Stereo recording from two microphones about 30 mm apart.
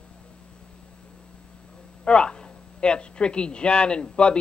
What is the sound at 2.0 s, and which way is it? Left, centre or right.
Speech, left.